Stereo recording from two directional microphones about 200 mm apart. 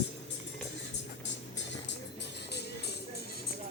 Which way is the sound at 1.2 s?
65° left (ahead or behind).